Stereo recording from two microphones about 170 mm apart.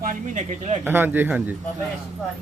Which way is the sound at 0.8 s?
10° right (ahead or behind).